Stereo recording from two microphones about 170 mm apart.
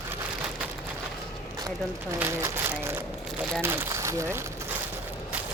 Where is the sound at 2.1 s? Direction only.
15° right (ahead or behind).